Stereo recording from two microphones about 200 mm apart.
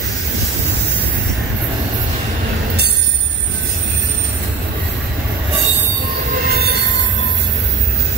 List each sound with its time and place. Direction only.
6.5 s train: 50° right (ahead or behind)